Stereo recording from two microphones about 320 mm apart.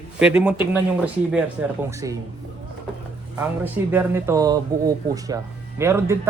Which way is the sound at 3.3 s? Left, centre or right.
Centre.